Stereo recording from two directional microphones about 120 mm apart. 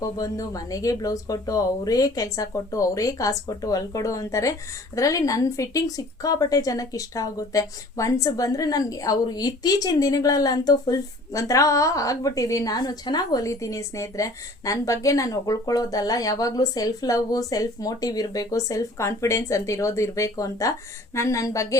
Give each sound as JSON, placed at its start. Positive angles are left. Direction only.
{"t": 0.2, "sound": "a woman's voice", "side_deg": 30}